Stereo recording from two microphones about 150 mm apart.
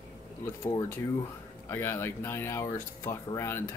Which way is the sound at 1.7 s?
15° left (ahead or behind).